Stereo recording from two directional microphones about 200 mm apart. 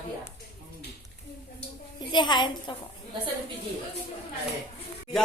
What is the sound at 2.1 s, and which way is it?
Speech, 20° left (ahead or behind).